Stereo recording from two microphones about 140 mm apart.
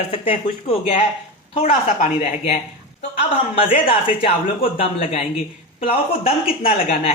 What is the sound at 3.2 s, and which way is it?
A woman's voice, 40° left (ahead or behind).